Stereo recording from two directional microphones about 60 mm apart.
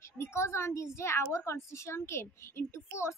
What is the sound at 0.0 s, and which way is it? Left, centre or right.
A child's voice, left.